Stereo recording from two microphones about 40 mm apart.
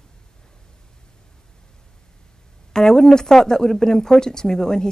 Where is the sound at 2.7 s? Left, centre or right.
Centre.